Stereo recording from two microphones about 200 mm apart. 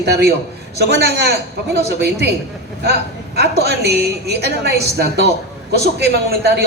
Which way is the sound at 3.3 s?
55° right (ahead or behind).